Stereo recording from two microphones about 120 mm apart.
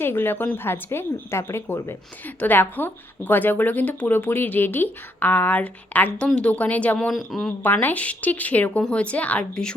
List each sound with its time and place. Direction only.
0.0 s speech: 20° left (ahead or behind); by 7.5 s centre (ahead or behind)
7.6 s speech: 15° left (ahead or behind)